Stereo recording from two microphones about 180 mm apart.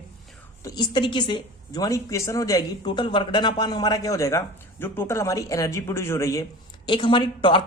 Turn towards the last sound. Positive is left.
turn(degrees=30)  # may be behind; listen again after turning